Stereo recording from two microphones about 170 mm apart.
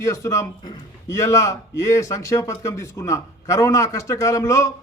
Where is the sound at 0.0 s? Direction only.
20° left (ahead or behind).